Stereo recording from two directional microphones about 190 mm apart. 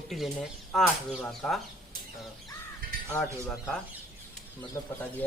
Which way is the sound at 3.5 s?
Centre (ahead or behind).